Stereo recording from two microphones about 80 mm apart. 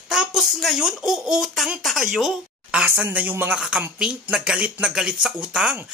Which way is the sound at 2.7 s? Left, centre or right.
Centre.